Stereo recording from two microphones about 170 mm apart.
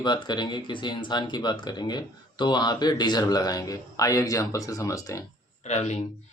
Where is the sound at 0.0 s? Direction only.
25° left (ahead or behind).